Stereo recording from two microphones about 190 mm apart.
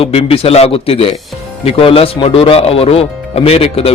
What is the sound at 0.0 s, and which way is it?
Speech, 30° left (ahead or behind).